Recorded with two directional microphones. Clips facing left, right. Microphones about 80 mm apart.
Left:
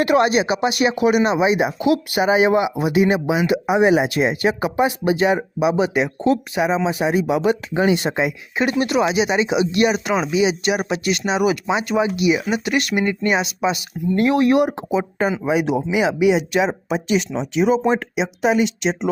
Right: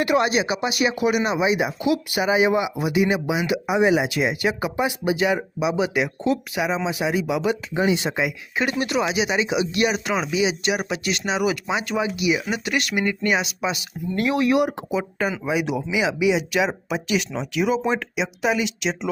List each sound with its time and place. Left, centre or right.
0.0 s speech: left
0.9 s speech: left
3.5 s speech: left
7.8 s speech: left
8.1 s speech: left
11.9 s speech: left
16.5 s speech: left